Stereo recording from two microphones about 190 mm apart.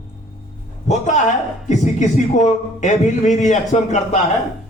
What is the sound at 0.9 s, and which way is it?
A man's voice, 40° left (ahead or behind).